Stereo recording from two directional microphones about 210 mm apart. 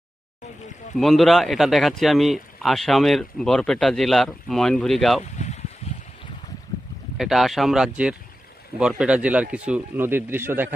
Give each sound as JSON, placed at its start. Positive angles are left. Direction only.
{"t": 0.9, "sound": "speech", "side_deg": 0}
{"t": 5.2, "sound": "a sound", "side_deg": 35}
{"t": 7.2, "sound": "speech", "side_deg": 0}